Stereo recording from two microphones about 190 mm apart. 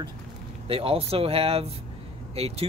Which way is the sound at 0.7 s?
30° right (ahead or behind).